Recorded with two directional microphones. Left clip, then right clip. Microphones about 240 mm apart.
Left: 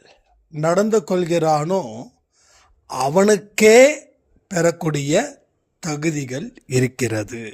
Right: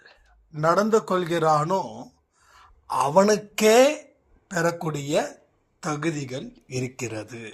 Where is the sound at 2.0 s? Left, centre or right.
Left.